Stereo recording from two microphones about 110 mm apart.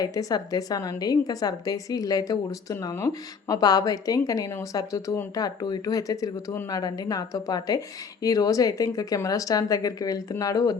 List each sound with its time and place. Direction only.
0.0 s a woman's voice: 35° left (ahead or behind)